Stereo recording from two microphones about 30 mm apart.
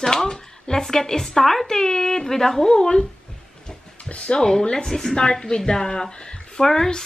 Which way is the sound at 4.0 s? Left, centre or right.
Left.